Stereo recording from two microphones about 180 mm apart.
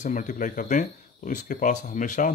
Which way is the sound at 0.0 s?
45° left (ahead or behind).